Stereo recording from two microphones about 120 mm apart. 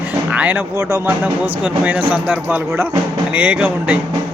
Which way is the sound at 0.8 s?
25° right (ahead or behind).